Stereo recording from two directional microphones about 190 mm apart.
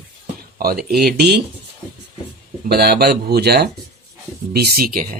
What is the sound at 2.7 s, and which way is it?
Speech, 55° right (ahead or behind).